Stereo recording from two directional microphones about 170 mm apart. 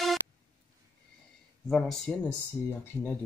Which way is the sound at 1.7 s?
Centre (ahead or behind).